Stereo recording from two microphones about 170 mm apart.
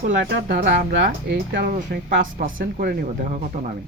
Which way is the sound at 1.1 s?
60° right (ahead or behind).